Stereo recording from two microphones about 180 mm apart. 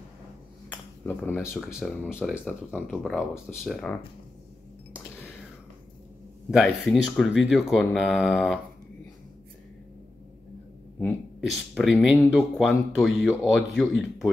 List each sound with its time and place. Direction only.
0.7 s a sound: 10° left (ahead or behind)
1.5 s speech: 5° right (ahead or behind)
6.5 s speech: centre (ahead or behind)
11.4 s speech: centre (ahead or behind)